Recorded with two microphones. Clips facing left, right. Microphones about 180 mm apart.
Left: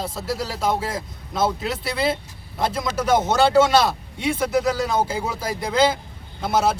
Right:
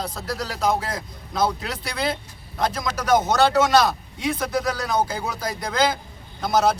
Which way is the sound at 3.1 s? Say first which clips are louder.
Even; 25° left (ahead or behind).